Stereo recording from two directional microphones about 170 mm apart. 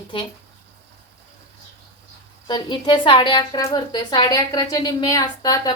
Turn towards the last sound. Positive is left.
turn(degrees=20)  # may be behind; listen again after turning